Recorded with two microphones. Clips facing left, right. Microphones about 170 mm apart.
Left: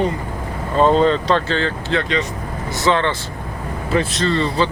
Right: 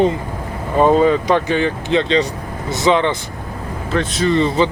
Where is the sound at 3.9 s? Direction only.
5° left (ahead or behind).